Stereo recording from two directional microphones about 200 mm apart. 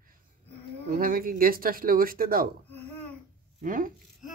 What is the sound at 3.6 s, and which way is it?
Speech, 45° right (ahead or behind).